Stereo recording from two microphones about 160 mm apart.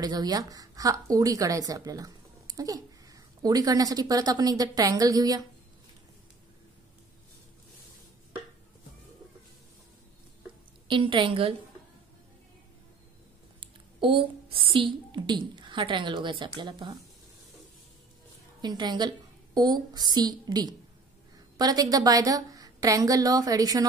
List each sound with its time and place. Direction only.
0.0 s speech: 25° right (ahead or behind)
10.9 s a woman's voice: 30° right (ahead or behind)
13.6 s speech: 30° right (ahead or behind)
18.6 s a woman's voice: 25° right (ahead or behind)